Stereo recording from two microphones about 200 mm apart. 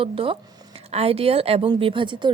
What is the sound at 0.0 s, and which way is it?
A woman's voice, 30° right (ahead or behind).